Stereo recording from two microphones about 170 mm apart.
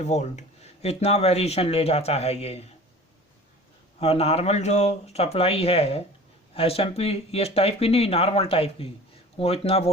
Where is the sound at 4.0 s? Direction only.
35° left (ahead or behind).